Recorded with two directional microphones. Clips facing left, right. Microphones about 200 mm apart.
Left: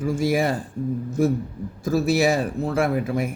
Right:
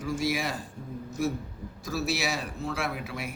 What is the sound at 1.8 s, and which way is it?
A man's voice, 50° left (ahead or behind).